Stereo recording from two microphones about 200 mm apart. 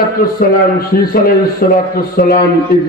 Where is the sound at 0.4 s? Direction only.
45° left (ahead or behind).